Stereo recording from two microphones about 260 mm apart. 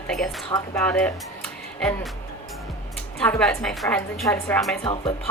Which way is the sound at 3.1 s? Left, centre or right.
Centre.